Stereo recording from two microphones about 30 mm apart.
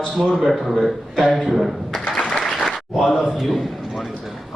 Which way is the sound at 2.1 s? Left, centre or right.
Left.